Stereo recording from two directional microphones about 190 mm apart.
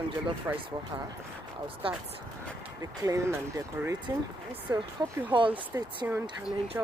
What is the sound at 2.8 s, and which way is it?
Speech, 20° right (ahead or behind).